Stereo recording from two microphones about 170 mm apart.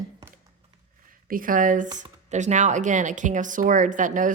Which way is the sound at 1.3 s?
55° right (ahead or behind).